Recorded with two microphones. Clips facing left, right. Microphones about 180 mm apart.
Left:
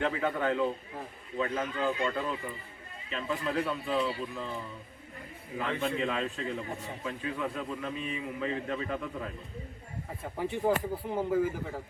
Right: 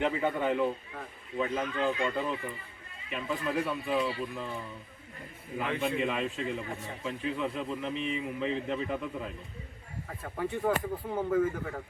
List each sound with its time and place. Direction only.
0.0 s speech: 15° right (ahead or behind)
5.5 s a man's voice: 10° right (ahead or behind)
10.3 s speech: 20° left (ahead or behind)
10.9 s speech: 5° left (ahead or behind)